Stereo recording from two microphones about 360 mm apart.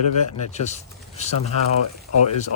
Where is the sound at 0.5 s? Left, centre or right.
Centre.